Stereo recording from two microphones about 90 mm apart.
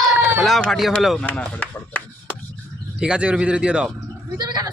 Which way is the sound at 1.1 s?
15° left (ahead or behind).